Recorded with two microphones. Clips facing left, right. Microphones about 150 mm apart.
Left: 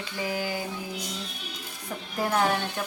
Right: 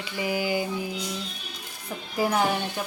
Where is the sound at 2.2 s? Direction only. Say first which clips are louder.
Right 1 dB; 5° right (ahead or behind).